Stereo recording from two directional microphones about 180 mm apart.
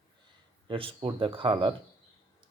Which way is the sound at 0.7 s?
30° right (ahead or behind).